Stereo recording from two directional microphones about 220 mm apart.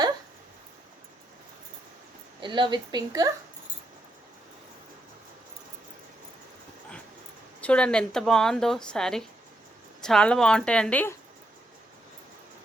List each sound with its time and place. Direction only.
2.4 s a woman's voice: 20° right (ahead or behind)
7.6 s speech: 5° left (ahead or behind)